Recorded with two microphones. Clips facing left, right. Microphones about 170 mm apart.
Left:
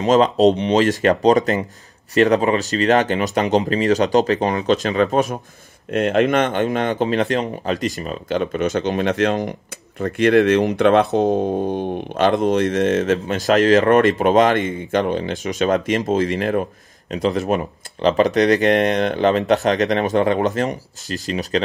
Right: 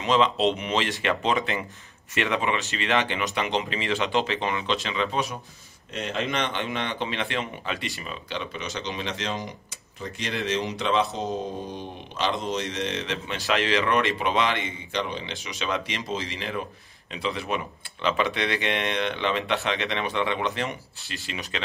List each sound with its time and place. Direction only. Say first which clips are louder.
0.0 s speech: left 8 dB; 40° left (ahead or behind)